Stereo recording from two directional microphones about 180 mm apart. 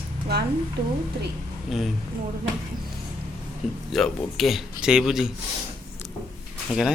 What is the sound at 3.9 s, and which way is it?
A man's voice, centre (ahead or behind).